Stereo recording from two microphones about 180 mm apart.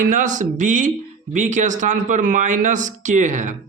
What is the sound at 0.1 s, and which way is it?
Speech, 45° right (ahead or behind).